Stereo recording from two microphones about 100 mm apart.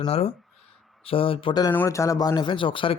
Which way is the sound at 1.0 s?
65° left (ahead or behind).